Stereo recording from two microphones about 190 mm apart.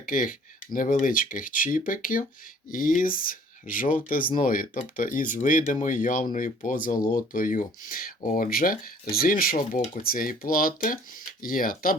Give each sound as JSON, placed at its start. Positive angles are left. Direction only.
{"t": 0.0, "sound": "speech", "side_deg": 45}